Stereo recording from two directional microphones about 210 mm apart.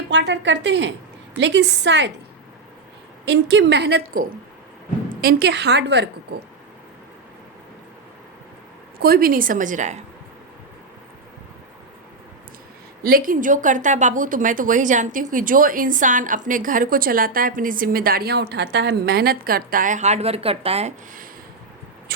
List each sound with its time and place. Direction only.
0.1 s a woman's voice: 60° right (ahead or behind)
3.2 s a woman's voice: 55° right (ahead or behind)
5.2 s a woman's voice: 55° right (ahead or behind)
9.0 s a woman's voice: 45° right (ahead or behind)
13.0 s a woman's voice: 45° right (ahead or behind)